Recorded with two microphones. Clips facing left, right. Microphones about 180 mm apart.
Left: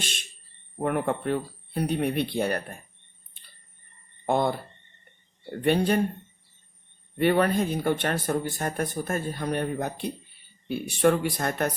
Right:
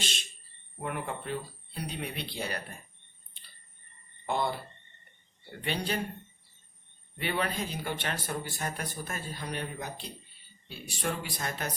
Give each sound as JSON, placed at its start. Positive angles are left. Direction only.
{"t": 0.0, "sound": "a sound", "side_deg": 55}
{"t": 0.8, "sound": "speech", "side_deg": 50}
{"t": 4.3, "sound": "speech", "side_deg": 50}
{"t": 7.2, "sound": "speech", "side_deg": 50}